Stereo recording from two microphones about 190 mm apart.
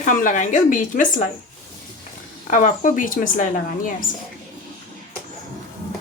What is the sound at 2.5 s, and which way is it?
A woman's voice, 40° left (ahead or behind).